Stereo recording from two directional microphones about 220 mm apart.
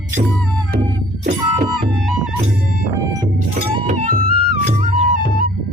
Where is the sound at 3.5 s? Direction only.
35° right (ahead or behind).